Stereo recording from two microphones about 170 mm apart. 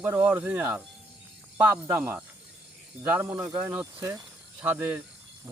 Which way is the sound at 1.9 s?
10° right (ahead or behind).